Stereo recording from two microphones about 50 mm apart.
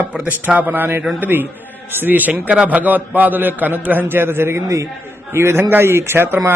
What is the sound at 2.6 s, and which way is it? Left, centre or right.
A man's voice, right.